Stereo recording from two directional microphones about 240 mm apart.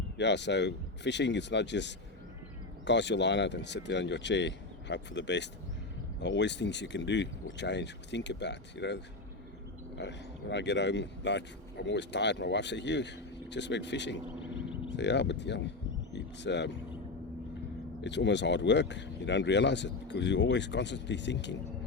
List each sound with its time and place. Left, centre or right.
0.2 s speech: left
10.0 s speech: left
18.0 s speech: left